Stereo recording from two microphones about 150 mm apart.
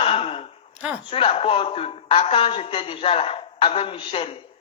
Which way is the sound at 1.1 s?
40° left (ahead or behind).